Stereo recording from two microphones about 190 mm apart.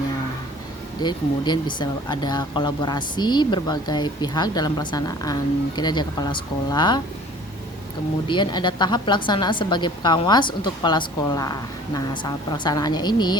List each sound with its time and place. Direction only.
1.0 s speech: 25° left (ahead or behind)
8.3 s speech: 25° left (ahead or behind)